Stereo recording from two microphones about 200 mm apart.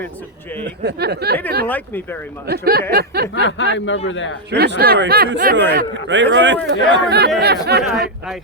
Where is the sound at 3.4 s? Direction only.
65° left (ahead or behind).